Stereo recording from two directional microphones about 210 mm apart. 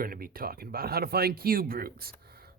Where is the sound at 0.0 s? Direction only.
45° right (ahead or behind).